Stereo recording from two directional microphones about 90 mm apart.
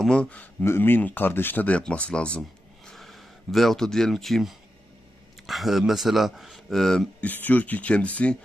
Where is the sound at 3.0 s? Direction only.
Centre (ahead or behind).